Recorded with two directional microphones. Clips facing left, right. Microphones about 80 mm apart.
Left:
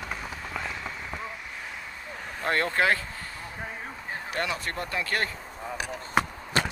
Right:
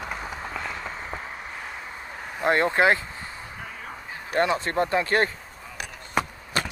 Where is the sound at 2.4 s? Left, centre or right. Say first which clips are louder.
Right 5 dB; right.